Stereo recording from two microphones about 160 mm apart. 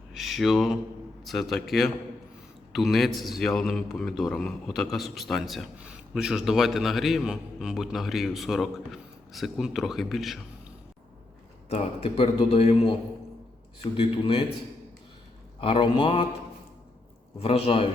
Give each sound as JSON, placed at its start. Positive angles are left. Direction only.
{"t": 0.1, "sound": "a man's voice", "side_deg": 0}
{"t": 11.7, "sound": "a man's voice", "side_deg": 40}
{"t": 15.6, "sound": "a man's voice", "side_deg": 35}
{"t": 17.4, "sound": "a man's voice", "side_deg": 40}